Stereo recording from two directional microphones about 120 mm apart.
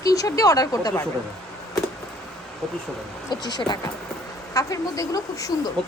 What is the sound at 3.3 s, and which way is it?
Speech, 35° left (ahead or behind).